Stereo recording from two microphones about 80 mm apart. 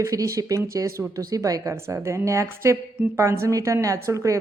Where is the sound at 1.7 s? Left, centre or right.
Right.